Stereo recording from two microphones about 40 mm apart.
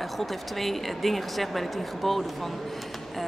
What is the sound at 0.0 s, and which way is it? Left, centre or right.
Speech, centre.